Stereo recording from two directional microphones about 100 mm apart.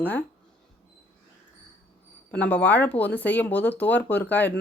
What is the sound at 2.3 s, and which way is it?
Speech, 15° left (ahead or behind).